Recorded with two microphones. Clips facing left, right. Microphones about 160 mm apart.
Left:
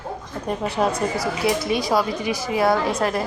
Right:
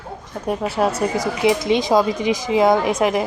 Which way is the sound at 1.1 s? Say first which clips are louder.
Right 4 dB; 20° right (ahead or behind).